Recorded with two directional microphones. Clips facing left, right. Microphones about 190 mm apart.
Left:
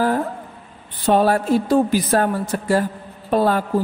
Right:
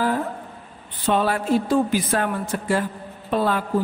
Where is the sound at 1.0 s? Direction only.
40° left (ahead or behind).